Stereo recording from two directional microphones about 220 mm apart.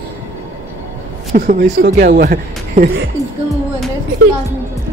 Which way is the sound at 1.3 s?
40° right (ahead or behind).